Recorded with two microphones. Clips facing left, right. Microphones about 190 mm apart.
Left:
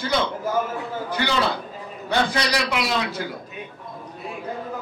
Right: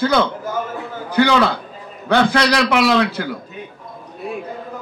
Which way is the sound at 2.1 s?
70° right (ahead or behind).